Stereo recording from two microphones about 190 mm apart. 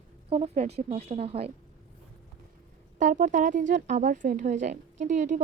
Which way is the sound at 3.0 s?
40° right (ahead or behind).